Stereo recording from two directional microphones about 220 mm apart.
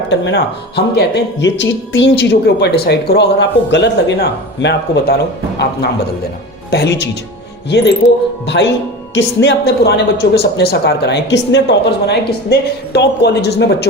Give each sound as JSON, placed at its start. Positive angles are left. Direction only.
{"t": 0.1, "sound": "speech", "side_deg": 55}
{"t": 6.7, "sound": "speech", "side_deg": 50}
{"t": 8.0, "sound": "speech", "side_deg": 30}
{"t": 8.4, "sound": "speech", "side_deg": 50}